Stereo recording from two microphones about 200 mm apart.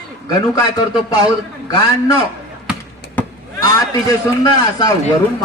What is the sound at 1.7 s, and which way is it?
A man's voice, 20° left (ahead or behind).